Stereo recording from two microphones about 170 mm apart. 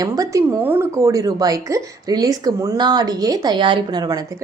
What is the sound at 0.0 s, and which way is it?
A woman's voice, 20° right (ahead or behind).